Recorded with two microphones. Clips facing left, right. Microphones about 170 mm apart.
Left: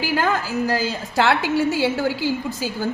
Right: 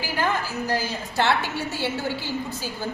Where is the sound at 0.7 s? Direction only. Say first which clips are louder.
Left 4 dB; 90° left.